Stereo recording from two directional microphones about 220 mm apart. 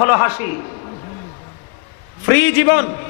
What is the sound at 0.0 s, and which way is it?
Speech, 20° left (ahead or behind).